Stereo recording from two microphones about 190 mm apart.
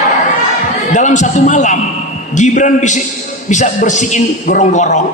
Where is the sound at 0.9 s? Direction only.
40° left (ahead or behind).